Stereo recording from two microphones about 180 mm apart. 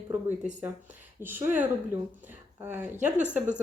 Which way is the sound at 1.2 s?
10° right (ahead or behind).